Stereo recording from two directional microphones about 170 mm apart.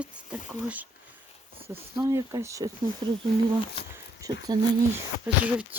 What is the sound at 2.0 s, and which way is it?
Speech, 20° right (ahead or behind).